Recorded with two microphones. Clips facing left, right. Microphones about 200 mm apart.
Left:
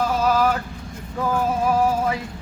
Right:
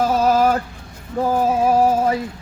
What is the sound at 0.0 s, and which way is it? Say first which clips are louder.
Male singing: right 4 dB; 40° right (ahead or behind).